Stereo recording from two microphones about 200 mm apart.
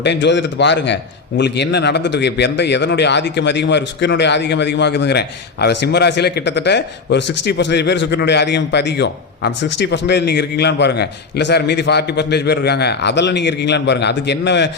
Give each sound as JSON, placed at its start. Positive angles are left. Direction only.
{"t": 0.0, "sound": "speech", "side_deg": 60}